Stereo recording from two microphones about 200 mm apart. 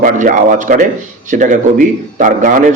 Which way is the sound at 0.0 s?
40° right (ahead or behind).